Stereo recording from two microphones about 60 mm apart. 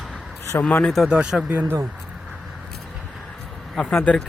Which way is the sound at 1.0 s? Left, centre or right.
Centre.